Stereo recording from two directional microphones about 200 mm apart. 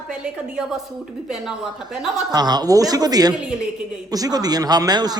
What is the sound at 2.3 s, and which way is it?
A man's voice, 20° right (ahead or behind).